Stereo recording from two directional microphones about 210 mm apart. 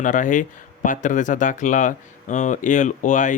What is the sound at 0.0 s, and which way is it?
Speech, 35° left (ahead or behind).